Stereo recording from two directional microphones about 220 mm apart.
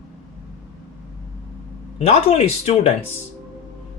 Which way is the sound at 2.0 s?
25° left (ahead or behind).